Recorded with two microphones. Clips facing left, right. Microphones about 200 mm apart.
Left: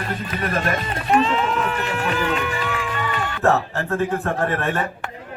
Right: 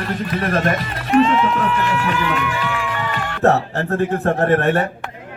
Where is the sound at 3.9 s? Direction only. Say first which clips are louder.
Right 4 dB; 40° right (ahead or behind).